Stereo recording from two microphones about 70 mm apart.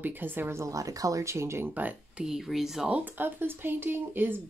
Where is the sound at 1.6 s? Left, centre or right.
Right.